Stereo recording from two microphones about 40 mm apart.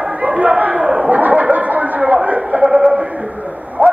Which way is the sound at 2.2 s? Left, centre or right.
Right.